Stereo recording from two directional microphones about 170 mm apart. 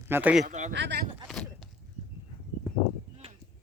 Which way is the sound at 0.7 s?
80° right.